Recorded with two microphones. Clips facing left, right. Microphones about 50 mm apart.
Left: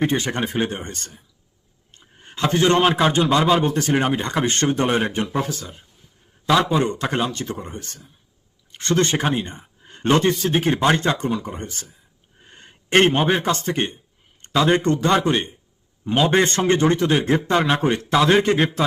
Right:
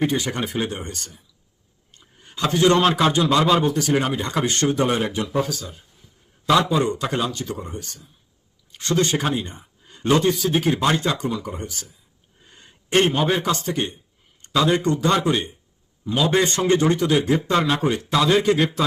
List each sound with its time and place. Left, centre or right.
0.1 s speech: left
1.9 s a sound: left
2.9 s a man's voice: left
3.6 s speech: left
6.6 s a man's voice: left